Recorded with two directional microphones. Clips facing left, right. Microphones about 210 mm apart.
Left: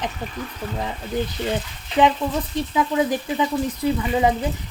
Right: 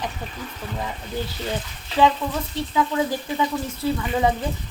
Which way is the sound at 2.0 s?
20° left (ahead or behind).